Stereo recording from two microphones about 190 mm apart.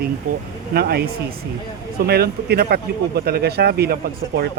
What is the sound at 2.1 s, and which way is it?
Speech, 55° right (ahead or behind).